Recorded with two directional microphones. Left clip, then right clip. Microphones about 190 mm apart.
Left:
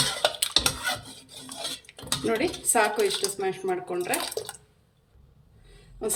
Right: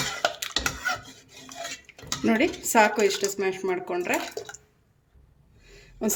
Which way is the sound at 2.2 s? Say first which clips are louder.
Right 3 dB; 50° right (ahead or behind).